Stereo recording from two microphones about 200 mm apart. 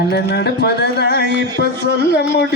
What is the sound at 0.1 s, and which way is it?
A man's voice, 55° left (ahead or behind).